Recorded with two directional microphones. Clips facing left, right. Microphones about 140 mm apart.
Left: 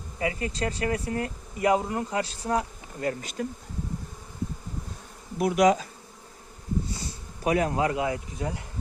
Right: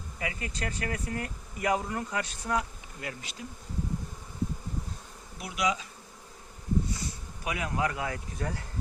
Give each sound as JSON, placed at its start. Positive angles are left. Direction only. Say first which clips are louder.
{"t": 0.2, "sound": "speech", "louder": "left 7 dB", "side_deg": 30}
{"t": 5.4, "sound": "speech", "louder": "left 10 dB", "side_deg": 50}
{"t": 6.9, "sound": "insect", "louder": "even", "side_deg": 35}
{"t": 7.8, "sound": "speech", "louder": "left 5 dB", "side_deg": 25}